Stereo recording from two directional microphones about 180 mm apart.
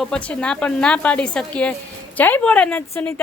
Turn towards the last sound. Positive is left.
turn(degrees=10)  # may be behind; listen again after turning